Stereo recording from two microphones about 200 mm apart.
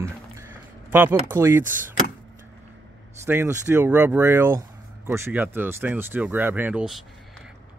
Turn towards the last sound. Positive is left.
turn(degrees=-5)  # may be behind; listen again after turning